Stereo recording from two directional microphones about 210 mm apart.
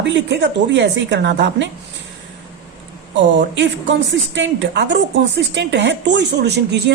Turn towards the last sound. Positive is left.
turn(degrees=-55)  # may be behind; listen again after turning